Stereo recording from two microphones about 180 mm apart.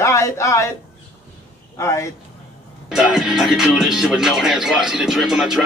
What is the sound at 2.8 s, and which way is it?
Speech, centre (ahead or behind).